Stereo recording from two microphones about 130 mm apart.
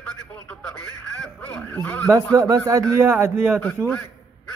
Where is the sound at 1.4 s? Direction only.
15° left (ahead or behind).